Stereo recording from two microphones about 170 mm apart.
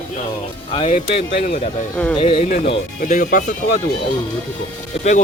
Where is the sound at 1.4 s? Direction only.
50° left (ahead or behind).